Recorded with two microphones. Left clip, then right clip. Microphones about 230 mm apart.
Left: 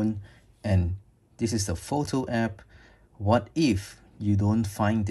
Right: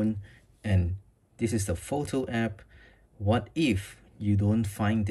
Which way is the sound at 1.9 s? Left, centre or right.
Centre.